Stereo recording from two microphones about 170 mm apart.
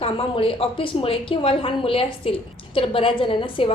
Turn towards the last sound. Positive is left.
turn(degrees=30)  # may be behind; listen again after turning